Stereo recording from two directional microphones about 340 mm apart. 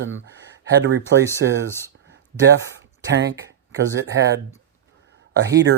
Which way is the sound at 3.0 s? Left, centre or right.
Right.